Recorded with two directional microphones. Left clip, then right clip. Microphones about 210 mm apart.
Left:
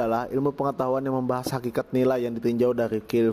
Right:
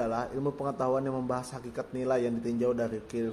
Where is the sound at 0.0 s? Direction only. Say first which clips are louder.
Left 6 dB; 40° left (ahead or behind).